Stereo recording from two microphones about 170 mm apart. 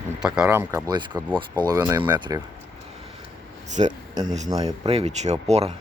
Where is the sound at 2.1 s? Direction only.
25° right (ahead or behind).